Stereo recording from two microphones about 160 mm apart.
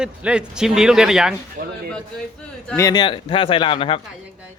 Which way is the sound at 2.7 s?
20° left (ahead or behind).